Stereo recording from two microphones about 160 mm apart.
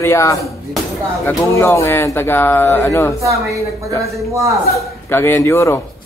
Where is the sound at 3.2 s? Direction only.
20° right (ahead or behind).